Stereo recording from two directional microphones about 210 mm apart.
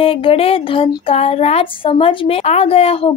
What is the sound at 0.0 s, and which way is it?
Speech, 25° left (ahead or behind).